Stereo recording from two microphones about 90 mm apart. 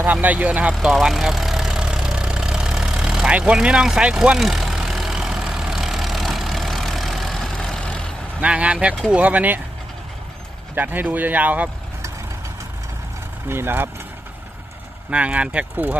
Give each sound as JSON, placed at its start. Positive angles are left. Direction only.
{"t": 0.0, "sound": "speech", "side_deg": -15}
{"t": 0.7, "sound": "vehicle", "side_deg": -5}
{"t": 8.4, "sound": "speech", "side_deg": -15}
{"t": 10.8, "sound": "speech", "side_deg": -20}
{"t": 13.5, "sound": "speech", "side_deg": -25}
{"t": 15.1, "sound": "speech", "side_deg": -15}